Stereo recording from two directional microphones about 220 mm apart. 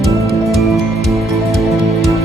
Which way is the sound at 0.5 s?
Centre (ahead or behind).